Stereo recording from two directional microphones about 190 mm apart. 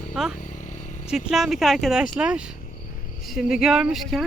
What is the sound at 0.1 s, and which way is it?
Speech, 5° right (ahead or behind).